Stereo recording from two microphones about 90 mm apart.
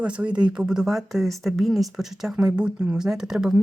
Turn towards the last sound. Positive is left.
turn(degrees=-5)  # may be behind; listen again after turning